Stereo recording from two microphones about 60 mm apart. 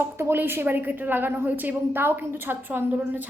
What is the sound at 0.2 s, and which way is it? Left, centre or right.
A woman's voice, right.